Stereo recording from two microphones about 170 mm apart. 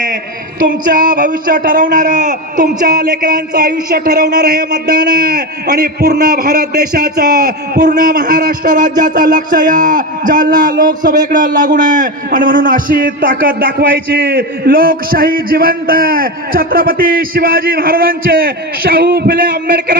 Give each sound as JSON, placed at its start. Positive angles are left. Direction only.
{"t": 0.9, "sound": "a man's voice", "side_deg": -55}
{"t": 2.6, "sound": "a man's voice", "side_deg": -70}